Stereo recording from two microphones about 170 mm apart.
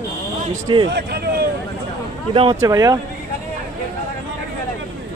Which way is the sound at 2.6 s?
20° right (ahead or behind).